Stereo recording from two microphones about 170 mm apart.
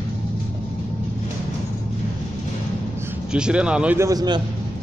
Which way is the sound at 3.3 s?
5° right (ahead or behind).